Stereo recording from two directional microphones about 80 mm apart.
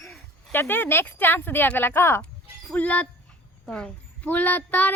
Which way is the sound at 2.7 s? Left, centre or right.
Centre.